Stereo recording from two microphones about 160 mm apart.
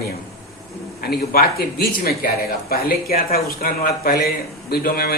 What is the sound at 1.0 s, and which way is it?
Speech, 75° left (ahead or behind).